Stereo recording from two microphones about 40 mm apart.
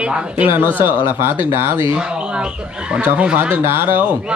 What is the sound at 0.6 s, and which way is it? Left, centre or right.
Speech, right.